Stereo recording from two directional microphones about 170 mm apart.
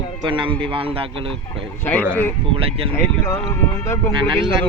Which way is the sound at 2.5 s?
35° right (ahead or behind).